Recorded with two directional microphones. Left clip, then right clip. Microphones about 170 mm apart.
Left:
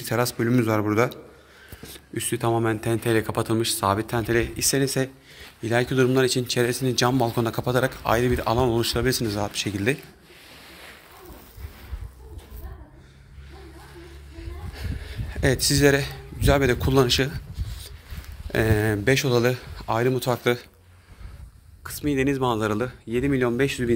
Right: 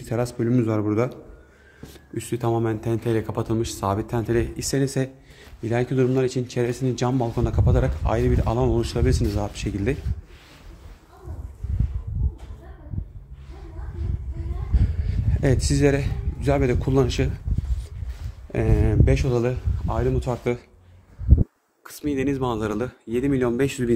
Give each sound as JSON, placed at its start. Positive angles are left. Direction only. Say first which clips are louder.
{"t": 0.0, "sound": "speech", "louder": "left 2 dB", "side_deg": 0}
{"t": 14.8, "sound": "speech", "louder": "right 2 dB", "side_deg": -15}
{"t": 18.5, "sound": "a man's voice", "louder": "left 2 dB", "side_deg": 5}
{"t": 21.8, "sound": "speech", "louder": "left 1 dB", "side_deg": 0}
{"t": 22.8, "sound": "speech", "louder": "even", "side_deg": -15}